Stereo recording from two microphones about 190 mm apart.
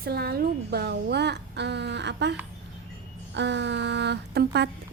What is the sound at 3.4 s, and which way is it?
Speech, 70° right (ahead or behind).